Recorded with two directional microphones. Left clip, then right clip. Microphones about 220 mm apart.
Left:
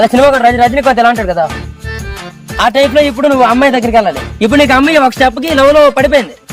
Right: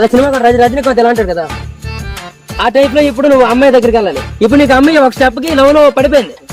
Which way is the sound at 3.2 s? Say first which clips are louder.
Right 3 dB; 40° left (ahead or behind).